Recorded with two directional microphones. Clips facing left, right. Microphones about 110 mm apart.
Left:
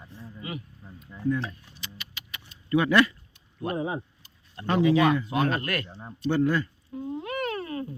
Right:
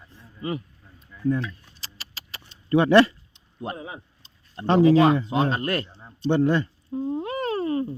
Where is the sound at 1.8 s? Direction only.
35° right (ahead or behind).